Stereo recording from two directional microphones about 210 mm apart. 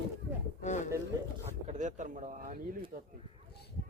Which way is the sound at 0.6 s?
35° left (ahead or behind).